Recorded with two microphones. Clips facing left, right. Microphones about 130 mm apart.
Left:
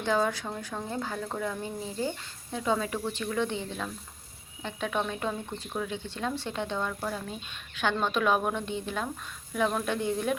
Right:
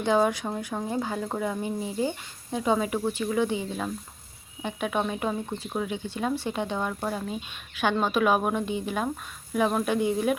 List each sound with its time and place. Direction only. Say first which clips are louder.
0.0 s speech: right 4 dB; 15° right (ahead or behind)